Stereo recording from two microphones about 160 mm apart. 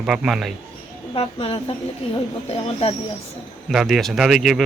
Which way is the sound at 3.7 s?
Centre (ahead or behind).